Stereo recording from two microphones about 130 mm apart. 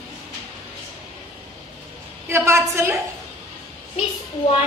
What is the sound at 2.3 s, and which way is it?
Speech, 20° right (ahead or behind).